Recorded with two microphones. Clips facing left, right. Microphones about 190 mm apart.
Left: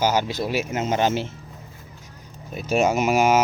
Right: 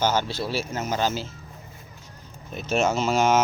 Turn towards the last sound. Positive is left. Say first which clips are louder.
# left 2 dB
turn(degrees=10)  # may be behind; listen again after turning